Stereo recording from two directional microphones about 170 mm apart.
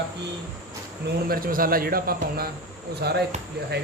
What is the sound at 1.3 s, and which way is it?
Speech, 55° right (ahead or behind).